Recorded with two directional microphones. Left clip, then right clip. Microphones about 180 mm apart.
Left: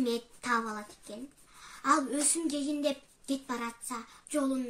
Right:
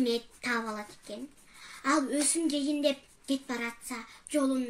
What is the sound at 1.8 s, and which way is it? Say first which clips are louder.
A child's voice: even; 15° left (ahead or behind).